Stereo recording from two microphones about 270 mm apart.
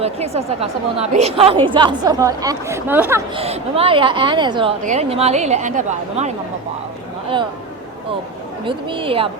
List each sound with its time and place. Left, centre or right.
0.0 s a woman's voice: right; by 3.2 s centre
3.3 s a woman's voice: right
8.6 s a woman's voice: centre